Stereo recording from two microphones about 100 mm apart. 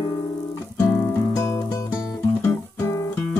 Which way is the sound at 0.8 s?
30° left (ahead or behind).